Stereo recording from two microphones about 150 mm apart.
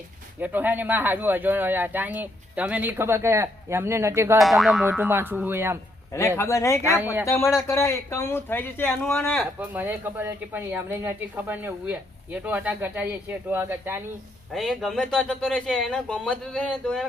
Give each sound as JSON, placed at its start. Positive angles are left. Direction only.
{"t": 0.3, "sound": "speech", "side_deg": -10}
{"t": 4.4, "sound": "speech", "side_deg": 0}
{"t": 4.9, "sound": "speech", "side_deg": -15}
{"t": 6.1, "sound": "speech", "side_deg": 20}
{"t": 7.0, "sound": "speech", "side_deg": -10}
{"t": 7.3, "sound": "speech", "side_deg": 15}
{"t": 9.6, "sound": "speech", "side_deg": -10}
{"t": 14.5, "sound": "speech", "side_deg": 0}